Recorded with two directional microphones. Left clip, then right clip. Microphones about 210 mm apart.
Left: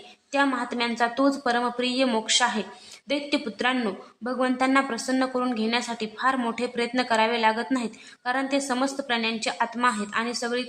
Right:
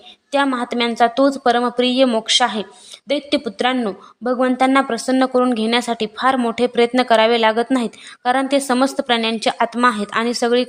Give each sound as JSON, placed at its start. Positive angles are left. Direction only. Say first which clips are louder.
{"t": 0.3, "sound": "a woman's voice", "louder": "right 6 dB", "side_deg": -35}